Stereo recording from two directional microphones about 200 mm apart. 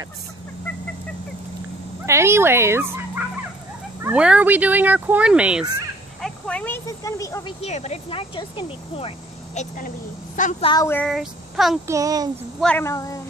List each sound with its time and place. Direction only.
2.0 s speech: 15° right (ahead or behind)
6.2 s speech: 5° left (ahead or behind)
7.6 s speech: 35° left (ahead or behind)
9.6 s a woman's voice: 40° left (ahead or behind)
10.6 s speech: 20° left (ahead or behind)
10.9 s child singing: 5° left (ahead or behind)
11.9 s speech: 15° right (ahead or behind)
12.5 s speech: 5° left (ahead or behind)